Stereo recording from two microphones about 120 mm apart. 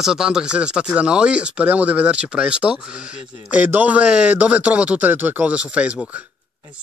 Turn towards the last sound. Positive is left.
turn(degrees=-10)  # may be behind; listen again after turning